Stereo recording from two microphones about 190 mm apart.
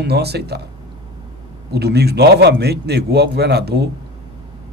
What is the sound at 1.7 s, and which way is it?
Speech, 60° right (ahead or behind).